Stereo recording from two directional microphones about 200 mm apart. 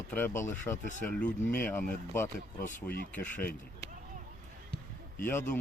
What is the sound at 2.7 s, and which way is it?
Speech, 50° left (ahead or behind).